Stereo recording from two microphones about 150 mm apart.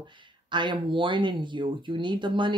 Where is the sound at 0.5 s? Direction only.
30° right (ahead or behind).